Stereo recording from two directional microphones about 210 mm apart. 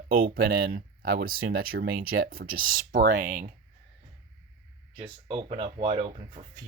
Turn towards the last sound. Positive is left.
turn(degrees=-25)  # may be behind; listen again after turning